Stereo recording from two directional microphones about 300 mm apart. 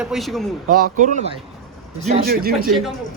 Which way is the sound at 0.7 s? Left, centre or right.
Right.